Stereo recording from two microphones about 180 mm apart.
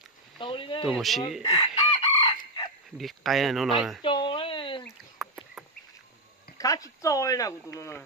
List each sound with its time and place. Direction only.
0.3 s speech: 30° left (ahead or behind)
0.9 s speech: centre (ahead or behind)
1.4 s chicken: 25° left (ahead or behind)
3.0 s speech: centre (ahead or behind)
4.0 s a sound: 25° left (ahead or behind)
4.8 s a sound: centre (ahead or behind)
6.6 s speech: 20° left (ahead or behind)